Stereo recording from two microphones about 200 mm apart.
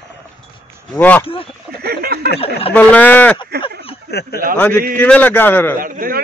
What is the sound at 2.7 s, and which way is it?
Speech, 10° left (ahead or behind).